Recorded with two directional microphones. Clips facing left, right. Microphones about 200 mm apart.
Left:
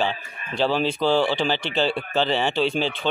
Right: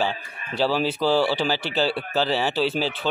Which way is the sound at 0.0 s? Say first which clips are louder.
Even; 10° right (ahead or behind).